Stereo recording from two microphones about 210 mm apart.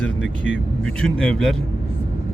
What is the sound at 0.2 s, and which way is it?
Speech, 60° left (ahead or behind).